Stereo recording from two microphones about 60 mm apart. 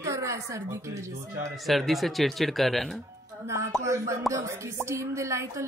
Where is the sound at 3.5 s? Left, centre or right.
Right.